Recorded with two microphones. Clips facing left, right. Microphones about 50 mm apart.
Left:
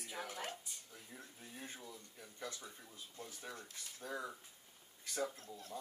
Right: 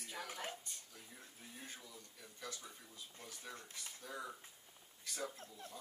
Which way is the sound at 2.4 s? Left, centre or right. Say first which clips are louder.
Left 2 dB; left.